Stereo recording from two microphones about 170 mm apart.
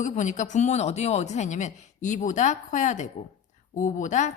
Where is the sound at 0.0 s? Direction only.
45° left (ahead or behind).